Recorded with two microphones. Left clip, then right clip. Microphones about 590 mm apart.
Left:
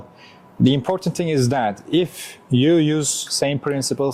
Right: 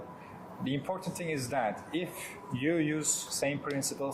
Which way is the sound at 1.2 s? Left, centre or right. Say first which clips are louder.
Left 12 dB; left.